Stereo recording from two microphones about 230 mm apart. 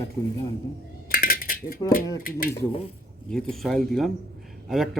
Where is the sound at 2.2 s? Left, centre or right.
Left.